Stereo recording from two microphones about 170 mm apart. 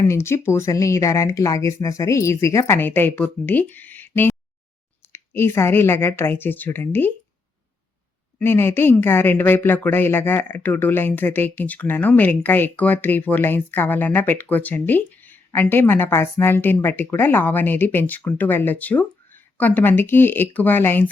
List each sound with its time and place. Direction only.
0.1 s a woman's voice: 15° left (ahead or behind)
8.4 s a woman's voice: 15° left (ahead or behind)